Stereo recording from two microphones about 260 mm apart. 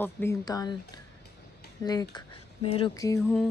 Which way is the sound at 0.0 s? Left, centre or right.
Centre.